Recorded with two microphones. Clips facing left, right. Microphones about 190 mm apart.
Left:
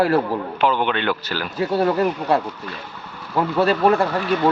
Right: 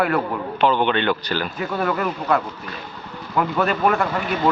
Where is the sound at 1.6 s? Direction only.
35° left (ahead or behind).